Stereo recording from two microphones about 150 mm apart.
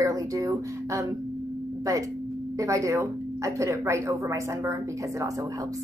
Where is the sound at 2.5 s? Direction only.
20° right (ahead or behind).